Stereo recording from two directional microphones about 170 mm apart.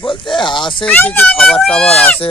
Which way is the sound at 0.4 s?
30° left (ahead or behind).